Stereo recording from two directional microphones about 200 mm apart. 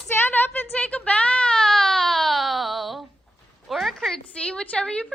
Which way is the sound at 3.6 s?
Centre (ahead or behind).